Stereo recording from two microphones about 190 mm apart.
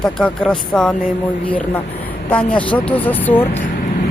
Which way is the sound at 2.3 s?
5° left (ahead or behind).